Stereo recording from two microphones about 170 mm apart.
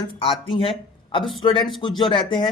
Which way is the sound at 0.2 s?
35° left (ahead or behind).